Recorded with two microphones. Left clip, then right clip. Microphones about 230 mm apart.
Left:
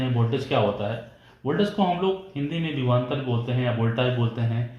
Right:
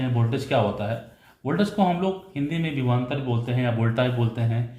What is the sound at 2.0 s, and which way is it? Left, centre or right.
Speech, right.